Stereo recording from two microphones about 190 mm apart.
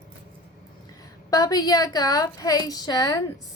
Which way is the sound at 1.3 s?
20° left (ahead or behind).